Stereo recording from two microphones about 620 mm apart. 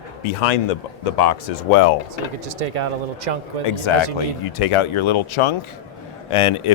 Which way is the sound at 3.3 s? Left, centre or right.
Right.